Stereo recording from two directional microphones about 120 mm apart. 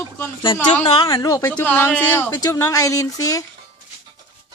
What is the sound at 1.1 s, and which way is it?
Speech, 30° left (ahead or behind).